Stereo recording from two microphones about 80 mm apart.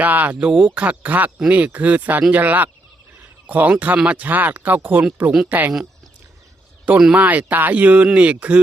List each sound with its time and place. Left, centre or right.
0.0 s speech: right
6.8 s speech: centre